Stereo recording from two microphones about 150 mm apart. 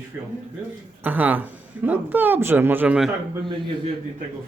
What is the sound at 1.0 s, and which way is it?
Speech, 10° right (ahead or behind).